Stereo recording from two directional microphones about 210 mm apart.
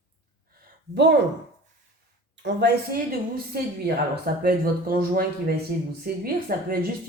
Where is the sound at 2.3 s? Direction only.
55° right (ahead or behind).